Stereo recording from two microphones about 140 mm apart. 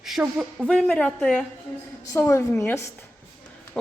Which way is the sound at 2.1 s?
20° left (ahead or behind).